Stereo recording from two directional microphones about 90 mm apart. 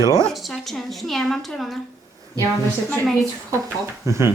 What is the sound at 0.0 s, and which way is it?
Speech, 35° right (ahead or behind).